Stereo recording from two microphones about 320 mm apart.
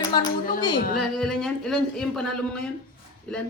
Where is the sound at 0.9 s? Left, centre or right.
Centre.